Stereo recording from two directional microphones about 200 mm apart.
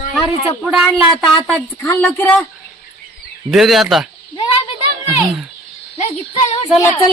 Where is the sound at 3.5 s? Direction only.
Centre (ahead or behind).